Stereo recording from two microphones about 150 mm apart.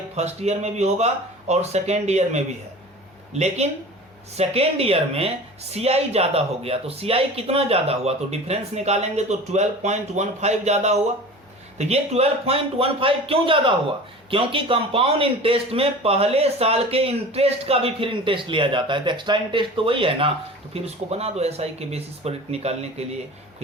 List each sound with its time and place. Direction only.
0.2 s a man's voice: 45° right (ahead or behind)